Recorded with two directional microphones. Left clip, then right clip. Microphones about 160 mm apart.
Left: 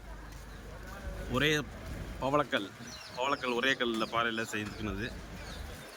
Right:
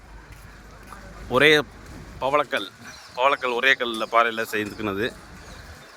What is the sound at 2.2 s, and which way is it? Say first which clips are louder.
A man's voice: right 8 dB; 15° right (ahead or behind).